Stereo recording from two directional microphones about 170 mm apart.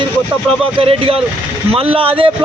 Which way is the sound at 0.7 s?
35° right (ahead or behind).